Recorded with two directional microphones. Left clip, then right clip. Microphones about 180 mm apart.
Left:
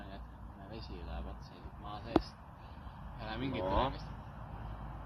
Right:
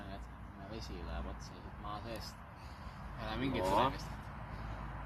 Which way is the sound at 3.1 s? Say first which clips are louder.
Right 1 dB; 25° right (ahead or behind).